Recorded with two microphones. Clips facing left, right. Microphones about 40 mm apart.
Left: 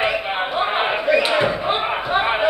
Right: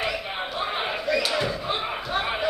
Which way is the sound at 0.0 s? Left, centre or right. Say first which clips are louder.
Left 8 dB; left.